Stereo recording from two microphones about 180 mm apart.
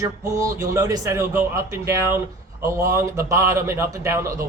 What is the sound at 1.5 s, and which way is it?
A man's voice, 15° right (ahead or behind).